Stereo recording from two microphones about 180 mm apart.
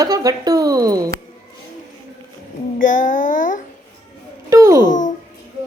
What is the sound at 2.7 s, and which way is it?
Speech, 50° left (ahead or behind).